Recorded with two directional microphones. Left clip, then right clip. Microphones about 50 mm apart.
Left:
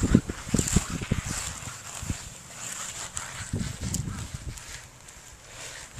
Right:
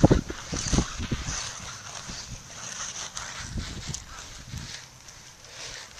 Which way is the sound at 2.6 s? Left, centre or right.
Centre.